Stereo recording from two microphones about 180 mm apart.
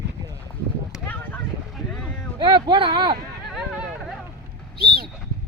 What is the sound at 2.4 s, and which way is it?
Speech, 25° right (ahead or behind).